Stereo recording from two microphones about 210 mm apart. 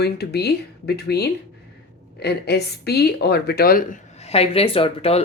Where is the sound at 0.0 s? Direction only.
50° left (ahead or behind).